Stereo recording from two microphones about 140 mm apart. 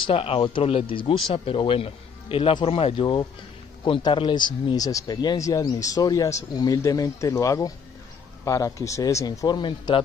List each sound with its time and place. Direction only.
0.0 s a man's voice: 40° left (ahead or behind)